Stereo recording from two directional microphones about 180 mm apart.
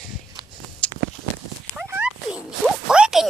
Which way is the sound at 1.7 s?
10° right (ahead or behind).